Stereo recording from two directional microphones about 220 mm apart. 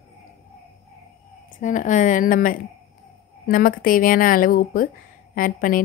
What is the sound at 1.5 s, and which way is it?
A woman's voice, 35° left (ahead or behind).